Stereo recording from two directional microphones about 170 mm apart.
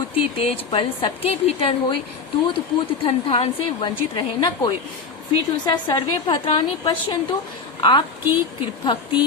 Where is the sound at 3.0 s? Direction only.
30° left (ahead or behind).